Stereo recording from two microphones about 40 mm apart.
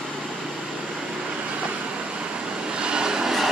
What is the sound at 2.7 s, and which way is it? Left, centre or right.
Vehicle, right.